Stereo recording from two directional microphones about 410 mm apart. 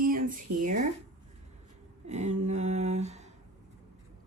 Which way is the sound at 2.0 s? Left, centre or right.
Centre.